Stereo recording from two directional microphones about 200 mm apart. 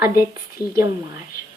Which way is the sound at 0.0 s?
10° right (ahead or behind).